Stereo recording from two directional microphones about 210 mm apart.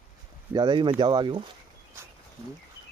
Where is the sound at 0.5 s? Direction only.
20° right (ahead or behind).